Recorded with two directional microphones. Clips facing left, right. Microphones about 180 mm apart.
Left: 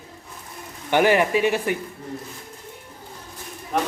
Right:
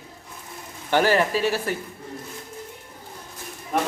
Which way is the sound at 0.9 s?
15° left (ahead or behind).